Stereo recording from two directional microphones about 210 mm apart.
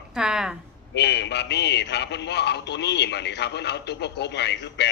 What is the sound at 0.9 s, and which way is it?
A man's voice, 55° left (ahead or behind).